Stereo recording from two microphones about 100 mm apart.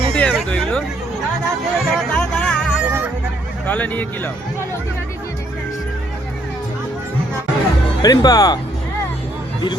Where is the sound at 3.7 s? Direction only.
15° left (ahead or behind).